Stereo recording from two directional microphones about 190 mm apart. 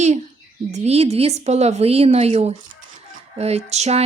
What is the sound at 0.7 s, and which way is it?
A woman's voice, 35° right (ahead or behind).